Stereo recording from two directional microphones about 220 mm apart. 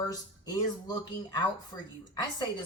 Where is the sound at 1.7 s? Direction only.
20° left (ahead or behind).